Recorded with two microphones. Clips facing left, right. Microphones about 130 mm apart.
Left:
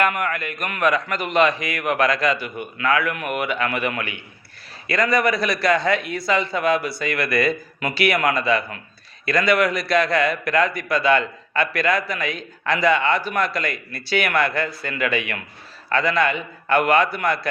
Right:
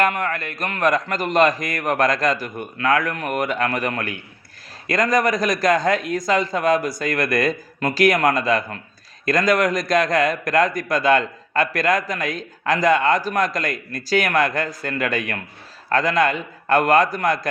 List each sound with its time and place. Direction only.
0.0 s a man's voice: 35° right (ahead or behind)